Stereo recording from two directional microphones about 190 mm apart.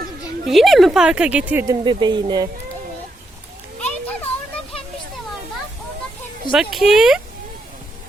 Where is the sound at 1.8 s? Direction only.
25° right (ahead or behind).